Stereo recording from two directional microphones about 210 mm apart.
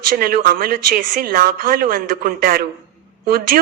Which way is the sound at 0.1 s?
45° right (ahead or behind).